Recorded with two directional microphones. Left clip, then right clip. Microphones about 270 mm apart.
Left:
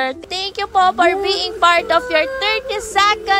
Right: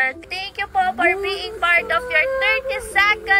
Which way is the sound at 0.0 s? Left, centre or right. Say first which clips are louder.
Left 1 dB; centre.